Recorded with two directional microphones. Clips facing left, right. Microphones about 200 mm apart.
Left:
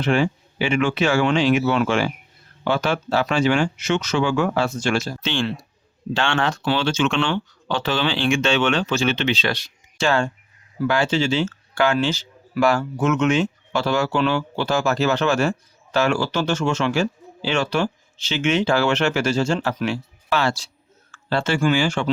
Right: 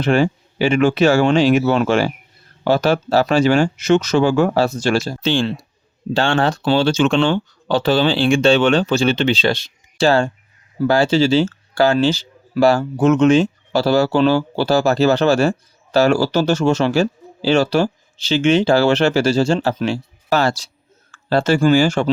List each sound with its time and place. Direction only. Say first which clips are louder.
0.0 s speech: right 4 dB; 40° right (ahead or behind)